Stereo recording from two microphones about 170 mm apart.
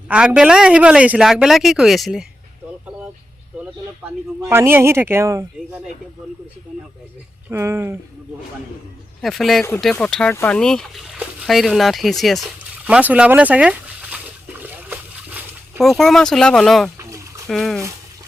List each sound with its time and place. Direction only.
0.1 s a woman's voice: 5° right (ahead or behind)
4.4 s speech: 15° right (ahead or behind)
7.5 s speech: 15° right (ahead or behind)
9.2 s a woman's voice: centre (ahead or behind)
14.6 s splash: 10° right (ahead or behind)
15.8 s a woman's voice: centre (ahead or behind)
17.0 s a sound: 15° right (ahead or behind)
17.5 s a woman's voice: centre (ahead or behind)